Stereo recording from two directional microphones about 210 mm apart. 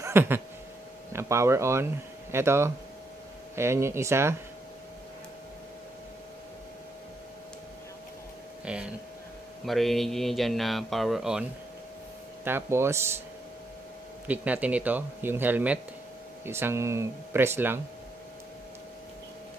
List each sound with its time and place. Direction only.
0.0 s a sound: 10° right (ahead or behind)
1.1 s speech: 10° right (ahead or behind)
8.6 s speech: 5° right (ahead or behind)
12.4 s speech: 10° right (ahead or behind)
14.2 s speech: 5° right (ahead or behind)